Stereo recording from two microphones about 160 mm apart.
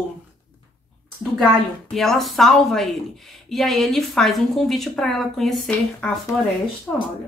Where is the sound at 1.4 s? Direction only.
Centre (ahead or behind).